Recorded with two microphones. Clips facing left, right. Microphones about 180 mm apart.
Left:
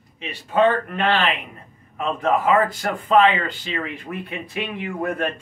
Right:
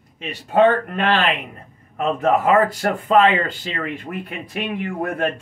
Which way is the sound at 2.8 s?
45° right (ahead or behind).